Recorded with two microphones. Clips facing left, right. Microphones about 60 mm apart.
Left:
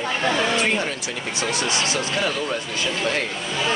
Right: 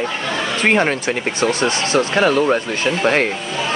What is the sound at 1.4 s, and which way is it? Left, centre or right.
Speech, right.